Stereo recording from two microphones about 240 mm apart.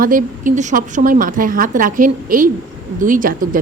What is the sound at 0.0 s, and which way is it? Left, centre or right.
Speech, right.